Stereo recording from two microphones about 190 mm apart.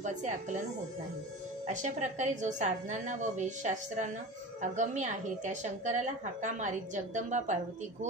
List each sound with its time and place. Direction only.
0.0 s a woman's voice: 40° right (ahead or behind)
1.7 s a woman's voice: 40° right (ahead or behind)